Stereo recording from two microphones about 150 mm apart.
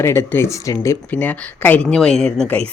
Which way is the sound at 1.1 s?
10° left (ahead or behind).